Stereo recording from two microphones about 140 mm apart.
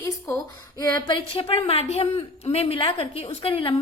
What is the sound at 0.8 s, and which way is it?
A woman's voice, 30° left (ahead or behind).